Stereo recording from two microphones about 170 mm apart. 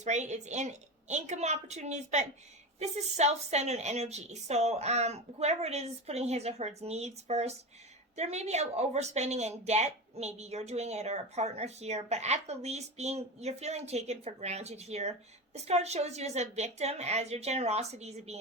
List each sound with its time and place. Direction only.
0.0 s a woman's voice: 45° right (ahead or behind)